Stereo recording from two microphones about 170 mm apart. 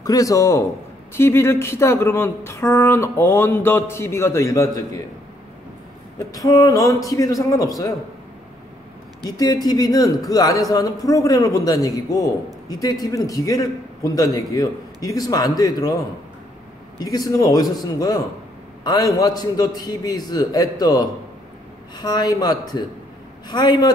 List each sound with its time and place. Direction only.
0.0 s a man's voice: 20° left (ahead or behind)
6.3 s a man's voice: 20° left (ahead or behind)
9.4 s a man's voice: 20° left (ahead or behind)
17.0 s a man's voice: 20° left (ahead or behind)
21.9 s a man's voice: 25° left (ahead or behind)